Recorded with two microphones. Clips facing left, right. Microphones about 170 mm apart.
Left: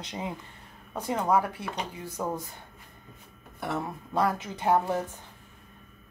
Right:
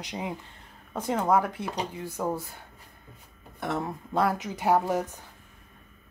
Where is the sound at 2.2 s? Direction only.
Centre (ahead or behind).